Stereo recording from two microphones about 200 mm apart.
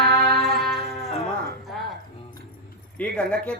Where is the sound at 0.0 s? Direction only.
50° right (ahead or behind).